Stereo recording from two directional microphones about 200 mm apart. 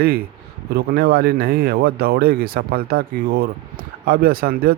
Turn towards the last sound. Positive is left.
turn(degrees=-50)  # may be behind; listen again after turning